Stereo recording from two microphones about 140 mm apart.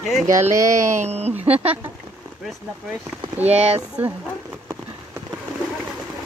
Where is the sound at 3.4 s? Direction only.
50° right (ahead or behind).